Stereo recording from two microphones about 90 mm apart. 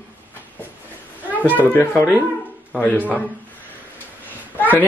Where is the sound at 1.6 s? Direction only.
25° left (ahead or behind).